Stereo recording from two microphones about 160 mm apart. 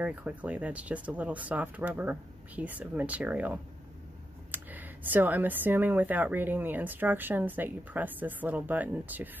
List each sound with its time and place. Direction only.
0.0 s speech: 10° right (ahead or behind)